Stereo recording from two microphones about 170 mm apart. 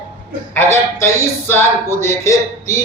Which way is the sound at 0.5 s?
15° left (ahead or behind).